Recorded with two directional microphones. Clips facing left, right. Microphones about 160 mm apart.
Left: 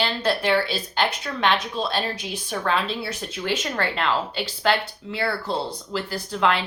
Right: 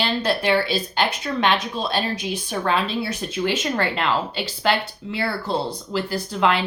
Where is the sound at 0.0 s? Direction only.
15° right (ahead or behind).